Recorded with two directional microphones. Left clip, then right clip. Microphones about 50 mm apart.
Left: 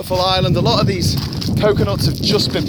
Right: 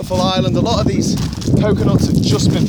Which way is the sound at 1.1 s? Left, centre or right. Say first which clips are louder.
Even; right.